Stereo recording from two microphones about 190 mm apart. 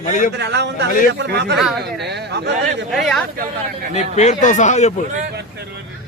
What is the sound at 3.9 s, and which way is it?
Speech, 35° left (ahead or behind).